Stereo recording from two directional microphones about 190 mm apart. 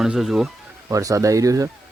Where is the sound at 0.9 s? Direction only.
15° right (ahead or behind).